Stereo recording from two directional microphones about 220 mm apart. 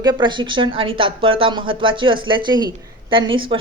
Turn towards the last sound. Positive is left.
turn(degrees=-25)  # may be behind; listen again after turning